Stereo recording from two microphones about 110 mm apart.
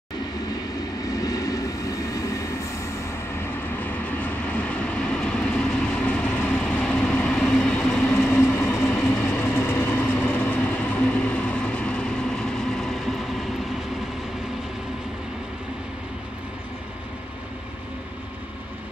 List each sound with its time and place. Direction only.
1.1 s train: 30° left (ahead or behind)
3.8 s vehicle: 15° left (ahead or behind)
8.2 s train: 20° left (ahead or behind)
9.1 s vehicle: 20° left (ahead or behind); by 13.3 s centre (ahead or behind)